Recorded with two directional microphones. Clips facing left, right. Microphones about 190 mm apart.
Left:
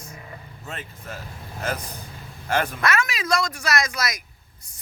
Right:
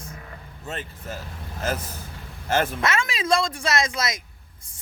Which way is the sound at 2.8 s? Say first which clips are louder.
Even; 25° right (ahead or behind).